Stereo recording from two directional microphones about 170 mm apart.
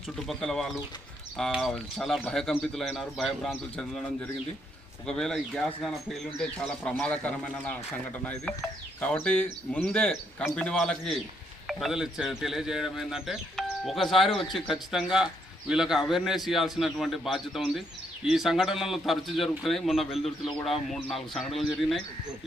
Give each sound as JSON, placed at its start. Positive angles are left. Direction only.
{"t": 0.3, "sound": "speech", "side_deg": 5}